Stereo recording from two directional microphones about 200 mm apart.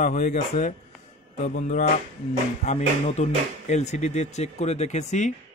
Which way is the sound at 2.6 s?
35° left (ahead or behind).